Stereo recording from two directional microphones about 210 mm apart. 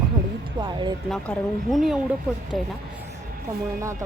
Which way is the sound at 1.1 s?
Centre (ahead or behind).